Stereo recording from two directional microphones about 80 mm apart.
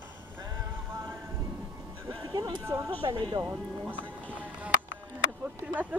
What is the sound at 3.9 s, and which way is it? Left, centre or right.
Music, centre.